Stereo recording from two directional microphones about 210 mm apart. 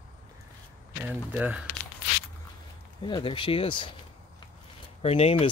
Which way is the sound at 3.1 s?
25° left (ahead or behind).